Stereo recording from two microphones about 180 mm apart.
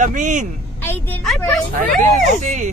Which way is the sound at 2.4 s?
40° right (ahead or behind).